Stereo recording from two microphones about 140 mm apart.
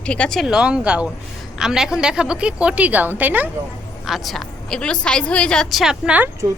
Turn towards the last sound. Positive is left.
turn(degrees=-10)  # may be behind; listen again after turning